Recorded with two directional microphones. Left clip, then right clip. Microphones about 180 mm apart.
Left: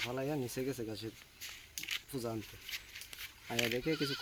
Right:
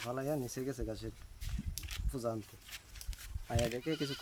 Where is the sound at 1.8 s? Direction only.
30° right (ahead or behind).